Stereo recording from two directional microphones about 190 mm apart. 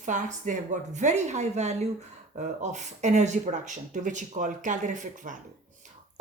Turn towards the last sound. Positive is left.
turn(degrees=-45)  # may be behind; listen again after turning